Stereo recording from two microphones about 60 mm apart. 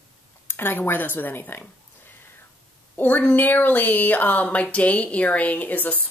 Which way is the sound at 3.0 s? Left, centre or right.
Left.